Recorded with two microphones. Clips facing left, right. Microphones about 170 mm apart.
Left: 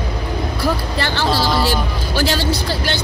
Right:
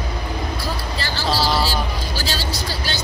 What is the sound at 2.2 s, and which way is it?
Speech, 60° left (ahead or behind).